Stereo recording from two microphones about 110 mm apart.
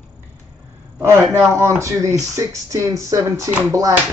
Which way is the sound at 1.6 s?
25° right (ahead or behind).